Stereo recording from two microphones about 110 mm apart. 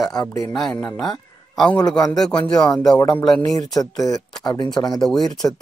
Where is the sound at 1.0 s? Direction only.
Centre (ahead or behind).